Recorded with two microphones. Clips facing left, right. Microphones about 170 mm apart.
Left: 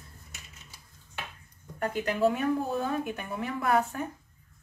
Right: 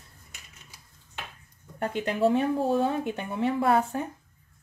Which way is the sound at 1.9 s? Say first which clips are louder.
Right 3 dB; 25° right (ahead or behind).